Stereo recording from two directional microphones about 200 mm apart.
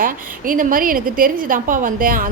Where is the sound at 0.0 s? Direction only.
45° right (ahead or behind).